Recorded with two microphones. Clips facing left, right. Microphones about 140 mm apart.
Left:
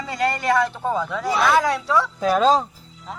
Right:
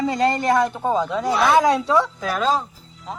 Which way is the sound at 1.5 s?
20° right (ahead or behind).